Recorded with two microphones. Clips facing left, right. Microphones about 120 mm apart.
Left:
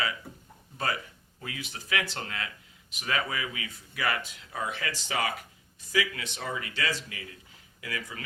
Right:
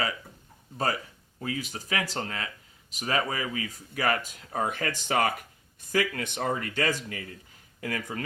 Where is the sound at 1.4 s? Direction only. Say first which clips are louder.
Right 7 dB; 40° right (ahead or behind).